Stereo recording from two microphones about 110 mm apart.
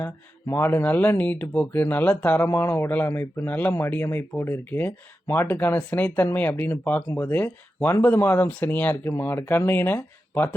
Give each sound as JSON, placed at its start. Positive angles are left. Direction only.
{"t": 0.0, "sound": "speech", "side_deg": 20}